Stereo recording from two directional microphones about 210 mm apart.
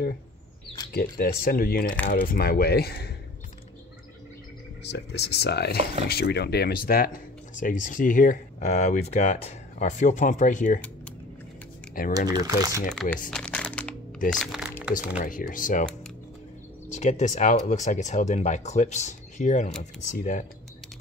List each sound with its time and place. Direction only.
1.1 s speech: 45° left (ahead or behind)
4.8 s speech: 55° left (ahead or behind); by 10.8 s 35° left (ahead or behind)
12.3 s speech: 15° right (ahead or behind)
12.9 s speech: centre (ahead or behind)
13.3 s crumpling: 5° left (ahead or behind)
14.3 s music: centre (ahead or behind)
15.2 s speech: 40° left (ahead or behind)
16.9 s speech: 35° left (ahead or behind)